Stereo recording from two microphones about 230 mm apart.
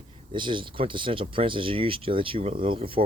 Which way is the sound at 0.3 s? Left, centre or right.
Right.